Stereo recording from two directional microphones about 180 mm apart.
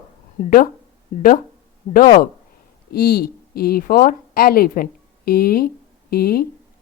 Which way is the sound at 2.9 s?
55° left (ahead or behind).